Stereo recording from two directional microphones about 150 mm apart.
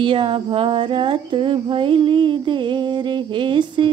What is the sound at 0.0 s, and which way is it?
Female singing, 35° right (ahead or behind).